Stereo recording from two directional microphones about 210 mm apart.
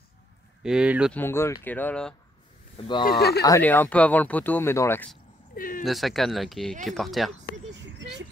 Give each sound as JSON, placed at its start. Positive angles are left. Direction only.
{"t": 0.6, "sound": "speech", "side_deg": -5}
{"t": 1.1, "sound": "speech", "side_deg": 10}
{"t": 3.1, "sound": "speech", "side_deg": 50}
{"t": 3.4, "sound": "speech", "side_deg": 10}
{"t": 5.5, "sound": "a sound", "side_deg": 40}
{"t": 5.9, "sound": "speech", "side_deg": 0}
{"t": 7.7, "sound": "vehicle", "side_deg": -55}